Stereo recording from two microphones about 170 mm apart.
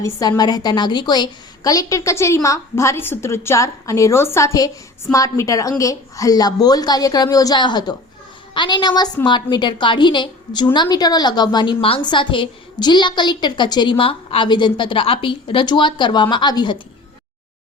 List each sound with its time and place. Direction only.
0.0 s a woman's voice: 20° left (ahead or behind)